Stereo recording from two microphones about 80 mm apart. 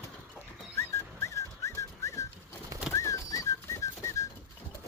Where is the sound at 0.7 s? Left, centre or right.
Left.